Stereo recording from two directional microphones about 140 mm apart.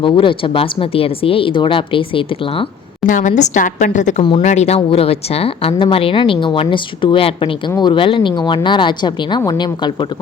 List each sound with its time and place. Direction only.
0.0 s speech: 40° left (ahead or behind)
3.1 s a woman's voice: 65° left (ahead or behind); by 10.1 s 30° left (ahead or behind)